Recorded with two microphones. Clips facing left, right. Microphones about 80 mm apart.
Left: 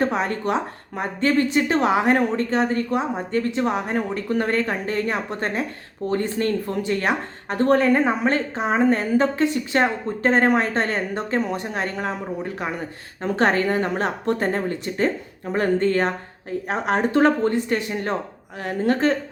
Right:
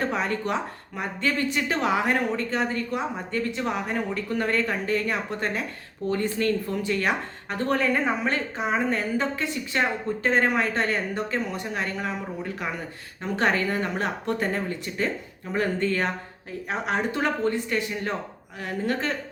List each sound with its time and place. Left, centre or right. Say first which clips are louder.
0.0 s a woman's voice: left 4 dB; left
2.9 s speech: left 5 dB; left
3.9 s a woman's voice: left 4 dB; left